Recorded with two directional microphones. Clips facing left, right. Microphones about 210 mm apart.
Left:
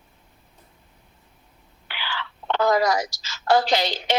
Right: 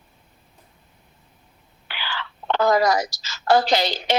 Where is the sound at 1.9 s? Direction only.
40° right (ahead or behind).